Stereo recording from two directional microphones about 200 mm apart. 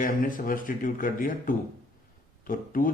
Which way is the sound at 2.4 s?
45° left (ahead or behind).